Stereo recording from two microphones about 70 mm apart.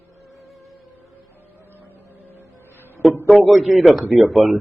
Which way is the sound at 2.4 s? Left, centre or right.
Left.